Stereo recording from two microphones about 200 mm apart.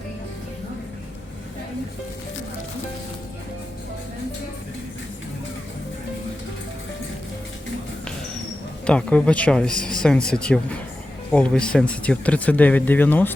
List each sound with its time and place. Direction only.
8.9 s speech: 5° left (ahead or behind)